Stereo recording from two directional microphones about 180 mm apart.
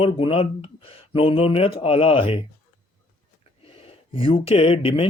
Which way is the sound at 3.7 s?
30° left (ahead or behind).